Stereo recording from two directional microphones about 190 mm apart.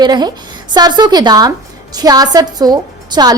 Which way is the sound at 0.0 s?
20° right (ahead or behind).